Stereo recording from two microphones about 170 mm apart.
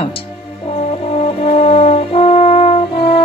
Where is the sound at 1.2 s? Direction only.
35° left (ahead or behind).